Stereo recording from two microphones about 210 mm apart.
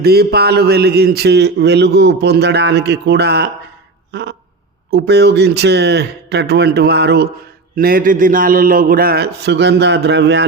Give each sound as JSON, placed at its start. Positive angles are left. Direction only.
{"t": 0.0, "sound": "a man's voice", "side_deg": -50}